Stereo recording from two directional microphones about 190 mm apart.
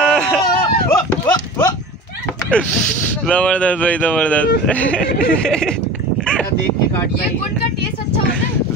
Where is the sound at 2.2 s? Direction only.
5° left (ahead or behind).